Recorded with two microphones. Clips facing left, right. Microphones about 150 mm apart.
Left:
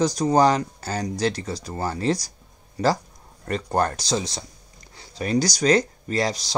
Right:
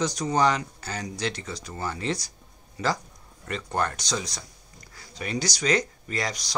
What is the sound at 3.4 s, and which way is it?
Speech, 40° left (ahead or behind).